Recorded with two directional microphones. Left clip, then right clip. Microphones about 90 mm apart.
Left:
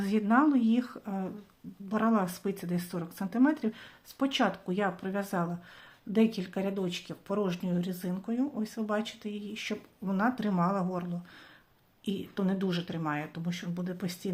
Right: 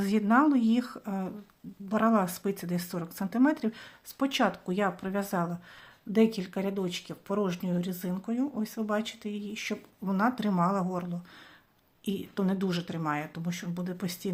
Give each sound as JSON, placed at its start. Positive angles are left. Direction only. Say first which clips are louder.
{"t": 0.0, "sound": "a woman's voice", "louder": "right 2 dB", "side_deg": -30}